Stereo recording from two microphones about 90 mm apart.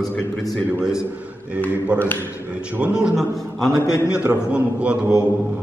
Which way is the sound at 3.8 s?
35° left (ahead or behind).